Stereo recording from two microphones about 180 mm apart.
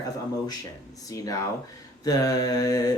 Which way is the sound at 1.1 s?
20° left (ahead or behind).